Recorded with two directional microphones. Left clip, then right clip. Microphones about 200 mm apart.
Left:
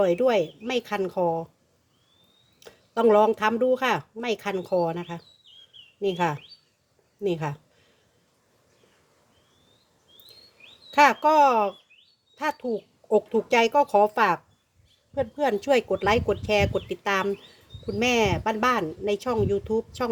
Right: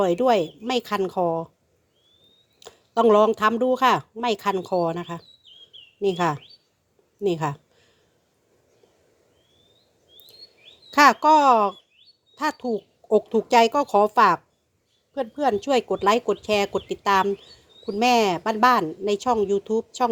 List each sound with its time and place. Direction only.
0.0 s speech: 20° right (ahead or behind)
2.6 s speech: 20° right (ahead or behind)
10.9 s speech: 20° right (ahead or behind)